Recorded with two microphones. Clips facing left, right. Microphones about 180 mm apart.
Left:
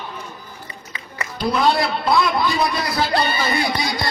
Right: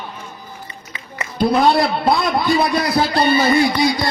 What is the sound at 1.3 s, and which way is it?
A man's voice, 55° right (ahead or behind).